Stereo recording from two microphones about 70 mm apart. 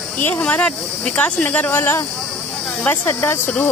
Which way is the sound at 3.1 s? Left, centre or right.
Left.